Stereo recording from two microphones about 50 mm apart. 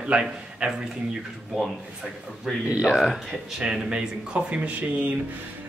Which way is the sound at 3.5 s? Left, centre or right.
Centre.